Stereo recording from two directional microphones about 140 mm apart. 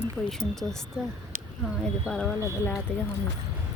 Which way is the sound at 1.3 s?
90° right.